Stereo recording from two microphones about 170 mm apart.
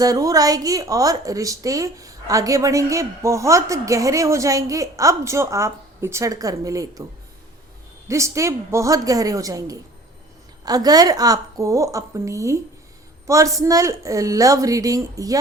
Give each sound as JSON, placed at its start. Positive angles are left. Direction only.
{"t": 0.0, "sound": "speech", "side_deg": -20}
{"t": 8.0, "sound": "speech", "side_deg": -15}